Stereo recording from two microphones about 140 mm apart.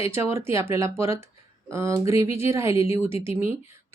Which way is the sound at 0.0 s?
20° right (ahead or behind).